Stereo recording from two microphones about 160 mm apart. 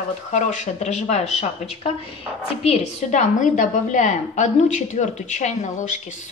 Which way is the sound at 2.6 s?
40° left (ahead or behind).